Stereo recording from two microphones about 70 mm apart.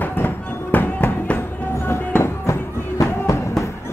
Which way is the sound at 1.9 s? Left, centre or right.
Left.